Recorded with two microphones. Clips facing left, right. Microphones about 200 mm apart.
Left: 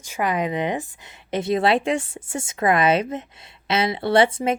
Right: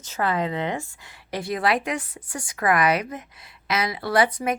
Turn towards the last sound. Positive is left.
turn(degrees=25)  # may be behind; listen again after turning